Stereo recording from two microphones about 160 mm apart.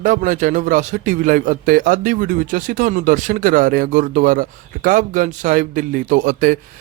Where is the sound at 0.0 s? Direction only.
50° right (ahead or behind).